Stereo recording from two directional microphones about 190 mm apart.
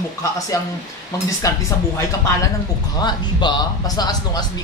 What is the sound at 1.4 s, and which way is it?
Speech, 15° left (ahead or behind).